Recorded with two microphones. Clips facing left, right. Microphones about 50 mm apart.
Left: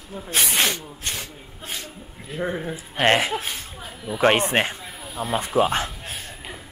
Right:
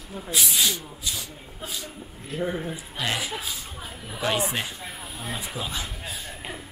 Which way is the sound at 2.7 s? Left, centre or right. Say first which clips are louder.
Left 10 dB; left.